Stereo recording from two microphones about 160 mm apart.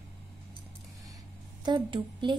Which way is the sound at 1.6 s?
30° right (ahead or behind).